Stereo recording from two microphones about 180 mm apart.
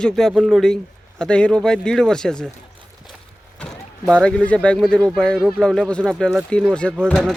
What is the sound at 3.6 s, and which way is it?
Speech, 5° left (ahead or behind).